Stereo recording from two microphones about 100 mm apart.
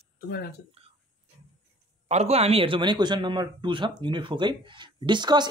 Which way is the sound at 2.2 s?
90° right.